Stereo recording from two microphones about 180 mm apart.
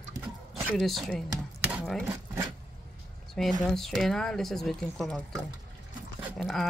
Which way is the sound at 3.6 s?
Centre (ahead or behind).